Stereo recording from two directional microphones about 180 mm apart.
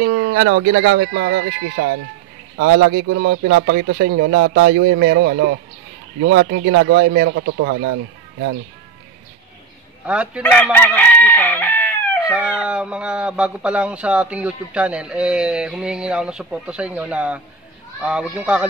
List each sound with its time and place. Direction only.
0.0 s speech: 85° right
2.6 s a man's voice: 70° right (ahead or behind)
10.0 s speech: 5° right (ahead or behind)
10.4 s chicken: 10° left (ahead or behind)
12.2 s speech: 5° right (ahead or behind)